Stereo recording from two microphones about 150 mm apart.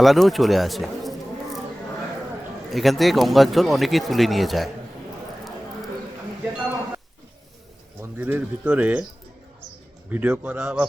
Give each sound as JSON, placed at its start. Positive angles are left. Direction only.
{"t": 0.0, "sound": "speech", "side_deg": 0}
{"t": 2.6, "sound": "speech", "side_deg": 0}
{"t": 8.0, "sound": "speech", "side_deg": -15}
{"t": 10.1, "sound": "speech", "side_deg": -10}